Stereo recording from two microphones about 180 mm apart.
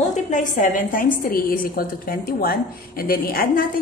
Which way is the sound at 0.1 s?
45° left (ahead or behind).